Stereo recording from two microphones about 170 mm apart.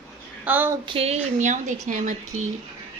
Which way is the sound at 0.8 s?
35° right (ahead or behind).